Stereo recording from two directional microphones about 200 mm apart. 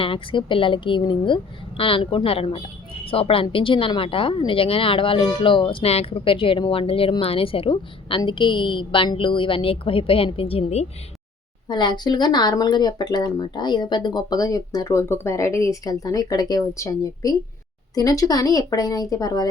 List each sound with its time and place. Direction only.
0.0 s a woman's voice: 25° left (ahead or behind)